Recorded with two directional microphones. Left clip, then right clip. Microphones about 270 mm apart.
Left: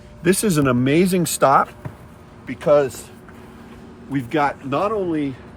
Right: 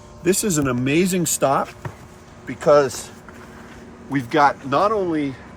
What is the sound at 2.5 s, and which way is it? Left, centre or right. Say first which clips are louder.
Speech: right 1 dB; centre.